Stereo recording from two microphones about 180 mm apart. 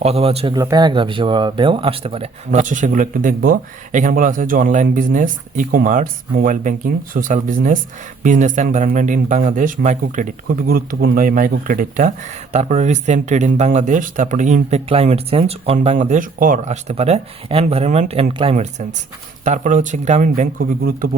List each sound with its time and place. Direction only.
0.0 s speech: 35° right (ahead or behind)
0.5 s speech: 20° right (ahead or behind); by 16.7 s 50° right (ahead or behind)
16.9 s speech: 35° right (ahead or behind); by 21.2 s 50° right (ahead or behind)